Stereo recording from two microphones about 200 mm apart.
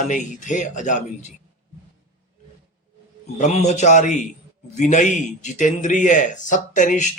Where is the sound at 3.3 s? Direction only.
35° left (ahead or behind).